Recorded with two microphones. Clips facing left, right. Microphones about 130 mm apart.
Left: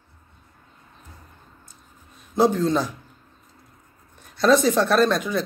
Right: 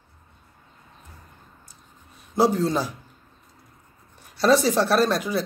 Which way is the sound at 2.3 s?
5° right (ahead or behind).